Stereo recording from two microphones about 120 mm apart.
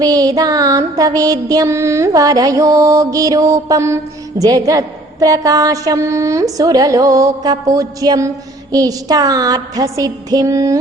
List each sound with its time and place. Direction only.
0.0 s music: 30° right (ahead or behind)
8.7 s a woman's voice: 30° right (ahead or behind)
10.0 s music: 30° right (ahead or behind)